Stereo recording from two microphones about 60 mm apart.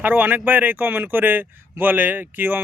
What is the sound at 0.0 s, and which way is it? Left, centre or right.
Speech, right.